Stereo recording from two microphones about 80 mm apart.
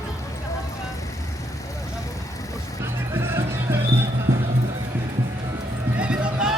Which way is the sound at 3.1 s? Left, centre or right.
Right.